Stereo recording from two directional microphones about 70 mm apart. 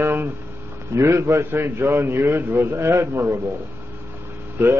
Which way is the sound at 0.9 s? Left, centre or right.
Right.